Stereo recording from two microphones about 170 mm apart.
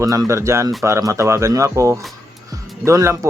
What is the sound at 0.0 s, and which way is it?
Speech, 20° right (ahead or behind).